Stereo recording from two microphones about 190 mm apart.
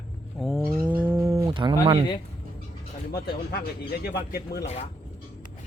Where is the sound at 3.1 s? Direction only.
55° left (ahead or behind).